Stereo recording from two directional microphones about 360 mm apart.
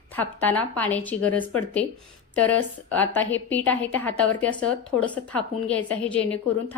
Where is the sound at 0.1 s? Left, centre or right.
Centre.